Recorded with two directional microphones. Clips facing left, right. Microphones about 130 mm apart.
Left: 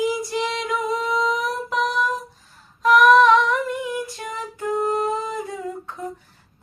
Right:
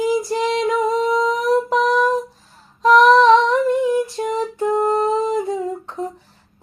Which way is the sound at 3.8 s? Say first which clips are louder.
Right 9 dB; 30° right (ahead or behind).